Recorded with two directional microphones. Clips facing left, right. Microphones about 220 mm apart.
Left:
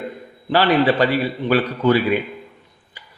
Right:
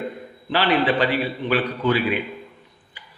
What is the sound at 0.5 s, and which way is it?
A man's voice, 45° left (ahead or behind).